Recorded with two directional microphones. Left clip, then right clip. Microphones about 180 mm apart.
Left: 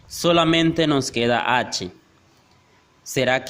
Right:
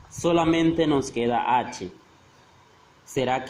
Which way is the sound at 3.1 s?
45° left (ahead or behind).